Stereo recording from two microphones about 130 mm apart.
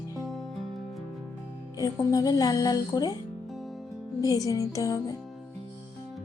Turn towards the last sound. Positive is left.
turn(degrees=25)  # may be behind; listen again after turning